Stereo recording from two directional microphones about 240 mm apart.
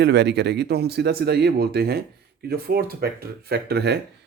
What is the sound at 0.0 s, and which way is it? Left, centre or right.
Speech, right.